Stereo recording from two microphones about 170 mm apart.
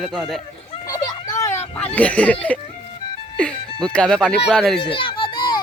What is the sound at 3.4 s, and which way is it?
Speech, 5° left (ahead or behind).